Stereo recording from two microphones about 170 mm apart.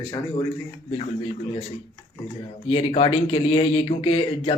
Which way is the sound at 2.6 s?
35° left (ahead or behind).